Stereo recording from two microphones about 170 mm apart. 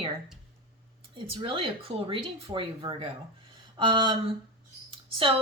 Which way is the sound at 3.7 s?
25° right (ahead or behind).